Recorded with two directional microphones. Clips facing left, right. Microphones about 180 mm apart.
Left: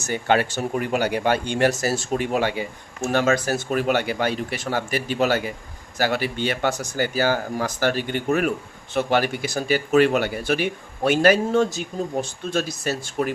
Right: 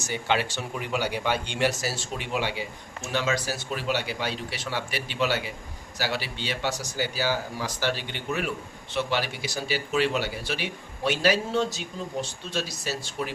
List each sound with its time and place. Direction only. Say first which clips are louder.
0.1 s speech: left 6 dB; 50° left (ahead or behind)